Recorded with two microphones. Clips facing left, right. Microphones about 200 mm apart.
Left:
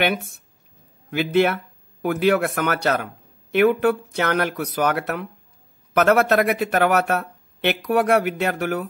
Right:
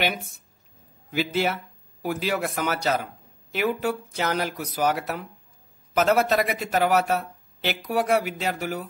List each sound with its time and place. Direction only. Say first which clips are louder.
1.1 s speech: left 6 dB; 60° left (ahead or behind)